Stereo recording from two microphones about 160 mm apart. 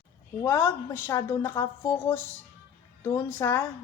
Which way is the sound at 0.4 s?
15° left (ahead or behind).